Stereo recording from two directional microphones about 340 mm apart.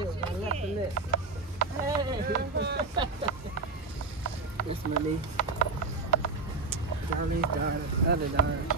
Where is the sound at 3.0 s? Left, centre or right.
Centre.